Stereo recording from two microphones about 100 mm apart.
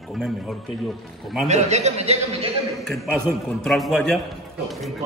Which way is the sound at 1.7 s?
90° right.